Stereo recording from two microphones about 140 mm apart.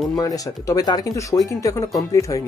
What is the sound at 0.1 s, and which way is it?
Speech, 25° left (ahead or behind).